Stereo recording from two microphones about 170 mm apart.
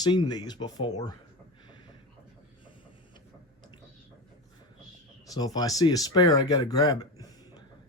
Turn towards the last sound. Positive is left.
turn(degrees=20)  # may be behind; listen again after turning